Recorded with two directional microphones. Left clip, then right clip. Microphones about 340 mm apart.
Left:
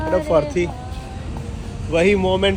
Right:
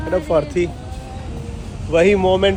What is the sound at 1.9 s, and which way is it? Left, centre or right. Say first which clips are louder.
Speech: right 3 dB; centre.